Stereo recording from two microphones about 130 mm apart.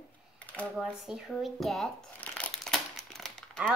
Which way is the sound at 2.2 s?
10° left (ahead or behind).